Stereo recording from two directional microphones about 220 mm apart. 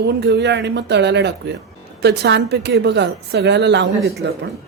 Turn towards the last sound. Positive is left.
turn(degrees=-50)  # may be behind; listen again after turning